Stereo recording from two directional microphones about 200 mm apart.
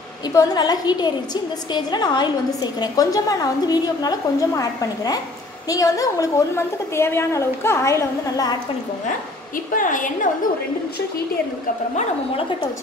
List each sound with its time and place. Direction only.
0.3 s a woman's voice: 20° left (ahead or behind)
9.8 s a woman's voice: 40° left (ahead or behind)